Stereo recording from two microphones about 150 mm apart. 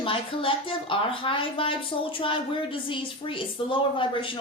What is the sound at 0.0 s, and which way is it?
Speech, 35° left (ahead or behind).